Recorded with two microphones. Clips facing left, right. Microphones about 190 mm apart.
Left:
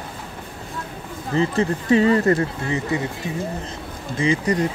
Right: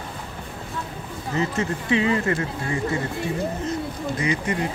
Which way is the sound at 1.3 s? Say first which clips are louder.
Left 5 dB; 35° left (ahead or behind).